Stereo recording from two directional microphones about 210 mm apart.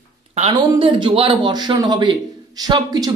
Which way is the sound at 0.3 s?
30° right (ahead or behind).